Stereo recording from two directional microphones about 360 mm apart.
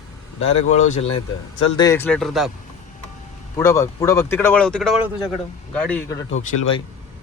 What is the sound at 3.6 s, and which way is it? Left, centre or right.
Speech, centre.